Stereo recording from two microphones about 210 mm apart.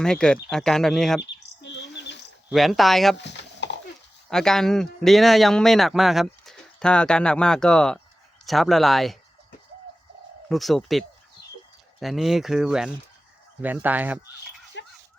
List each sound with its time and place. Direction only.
0.0 s a man's voice: 5° left (ahead or behind)
1.4 s bird: 55° left (ahead or behind)
2.5 s a man's voice: centre (ahead or behind)
3.2 s a sound: 55° left (ahead or behind)
4.3 s a man's voice: centre (ahead or behind)
10.5 s a man's voice: centre (ahead or behind)
14.8 s dog: 60° left (ahead or behind)